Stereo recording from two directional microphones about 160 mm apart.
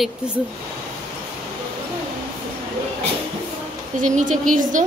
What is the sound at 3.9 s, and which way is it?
Speech, 50° right (ahead or behind).